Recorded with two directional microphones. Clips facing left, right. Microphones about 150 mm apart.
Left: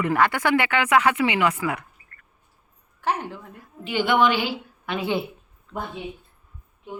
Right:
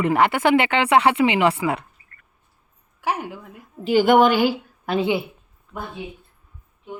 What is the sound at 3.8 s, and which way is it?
A woman's voice, 40° right (ahead or behind).